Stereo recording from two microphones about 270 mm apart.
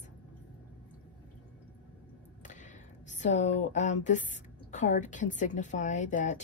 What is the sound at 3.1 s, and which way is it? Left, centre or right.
Speech, left.